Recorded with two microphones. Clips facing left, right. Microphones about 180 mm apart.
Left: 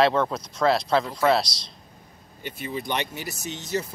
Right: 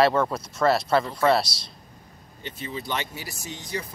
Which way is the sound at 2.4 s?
10° left (ahead or behind).